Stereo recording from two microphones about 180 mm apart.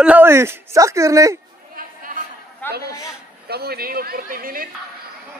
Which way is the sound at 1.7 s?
50° right (ahead or behind).